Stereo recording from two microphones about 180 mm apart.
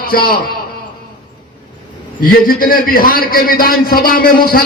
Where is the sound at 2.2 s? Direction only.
50° left (ahead or behind).